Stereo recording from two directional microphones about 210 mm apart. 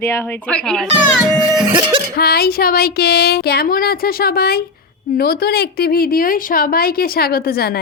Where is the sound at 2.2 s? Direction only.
50° left (ahead or behind).